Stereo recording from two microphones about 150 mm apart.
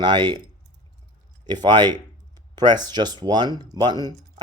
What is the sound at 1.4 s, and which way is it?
Speech, 30° right (ahead or behind).